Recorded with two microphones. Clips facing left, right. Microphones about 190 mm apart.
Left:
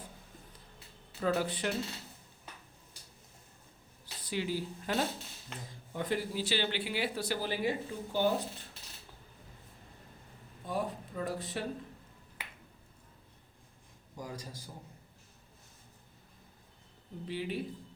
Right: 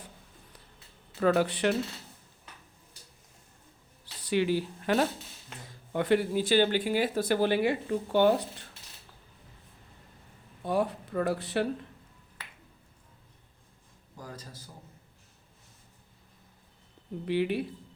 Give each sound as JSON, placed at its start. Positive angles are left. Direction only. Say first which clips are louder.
{"t": 1.2, "sound": "speech", "louder": "right 7 dB", "side_deg": -70}
{"t": 4.0, "sound": "speech", "louder": "right 9 dB", "side_deg": -70}
{"t": 10.6, "sound": "speech", "louder": "right 7 dB", "side_deg": -70}
{"t": 14.2, "sound": "a man's voice", "louder": "left 1 dB", "side_deg": 15}
{"t": 17.2, "sound": "speech", "louder": "right 8 dB", "side_deg": -70}